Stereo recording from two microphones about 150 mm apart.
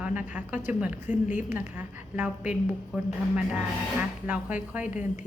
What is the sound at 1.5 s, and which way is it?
A woman's voice, 10° right (ahead or behind).